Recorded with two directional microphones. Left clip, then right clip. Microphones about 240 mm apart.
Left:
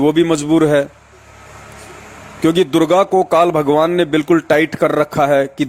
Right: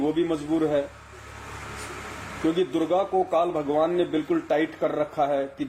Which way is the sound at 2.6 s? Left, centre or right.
Left.